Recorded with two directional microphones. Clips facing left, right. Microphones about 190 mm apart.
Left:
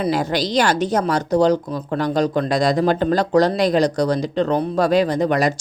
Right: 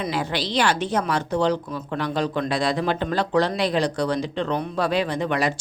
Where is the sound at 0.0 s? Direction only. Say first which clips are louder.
Left 6 dB; 40° left (ahead or behind).